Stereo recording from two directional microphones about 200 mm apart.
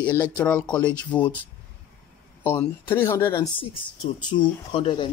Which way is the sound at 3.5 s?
25° left (ahead or behind).